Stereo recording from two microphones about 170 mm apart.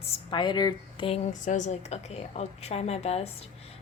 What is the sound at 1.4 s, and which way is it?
A woman's voice, 45° left (ahead or behind).